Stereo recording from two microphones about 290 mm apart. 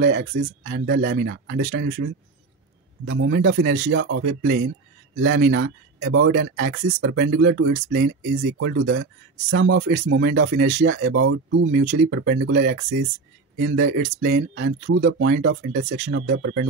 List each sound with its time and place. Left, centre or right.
0.0 s speech: right
11.8 s speech: right
12.1 s speech: right
14.0 s speech: right
14.3 s speech: right